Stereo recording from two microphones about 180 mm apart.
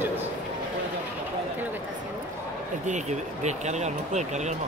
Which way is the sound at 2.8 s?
40° right (ahead or behind).